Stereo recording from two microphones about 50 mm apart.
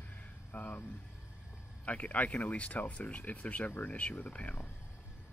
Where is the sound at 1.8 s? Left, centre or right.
Left.